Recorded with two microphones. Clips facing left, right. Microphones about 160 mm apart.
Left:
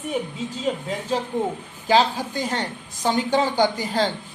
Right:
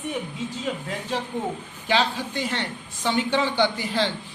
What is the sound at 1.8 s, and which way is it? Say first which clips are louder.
Speech: left 5 dB; 40° left (ahead or behind).